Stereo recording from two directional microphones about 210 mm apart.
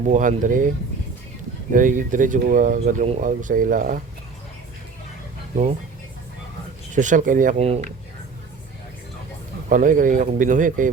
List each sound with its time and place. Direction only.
0.1 s speech: 40° right (ahead or behind)
1.7 s speech: 40° right (ahead or behind)
6.9 s speech: 35° right (ahead or behind)
9.6 s speech: 40° right (ahead or behind)